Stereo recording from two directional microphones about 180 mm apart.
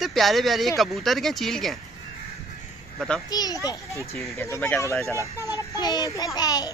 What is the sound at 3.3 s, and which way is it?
A child's voice, 20° left (ahead or behind).